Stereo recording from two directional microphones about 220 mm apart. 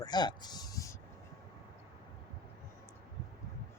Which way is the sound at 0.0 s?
20° left (ahead or behind).